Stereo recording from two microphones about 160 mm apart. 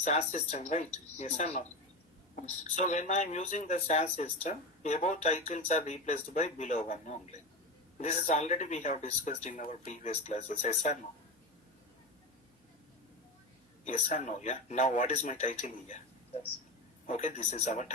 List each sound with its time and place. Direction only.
0.0 s speech: 45° left (ahead or behind)
13.8 s speech: 45° left (ahead or behind)
17.1 s speech: 45° left (ahead or behind)